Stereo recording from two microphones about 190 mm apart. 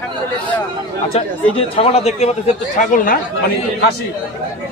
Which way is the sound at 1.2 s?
30° left (ahead or behind).